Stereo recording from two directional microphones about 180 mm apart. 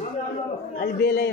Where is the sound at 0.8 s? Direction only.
60° left (ahead or behind).